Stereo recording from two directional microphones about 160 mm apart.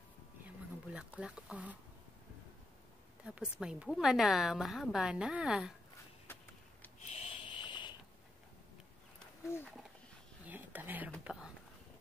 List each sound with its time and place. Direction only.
0.8 s speech: 5° right (ahead or behind)
3.3 s a woman's voice: 5° right (ahead or behind)
7.1 s a sound: 40° left (ahead or behind)
9.5 s speech: 15° left (ahead or behind)
10.4 s whispering: 10° right (ahead or behind)
11.2 s a woman's voice: 5° right (ahead or behind)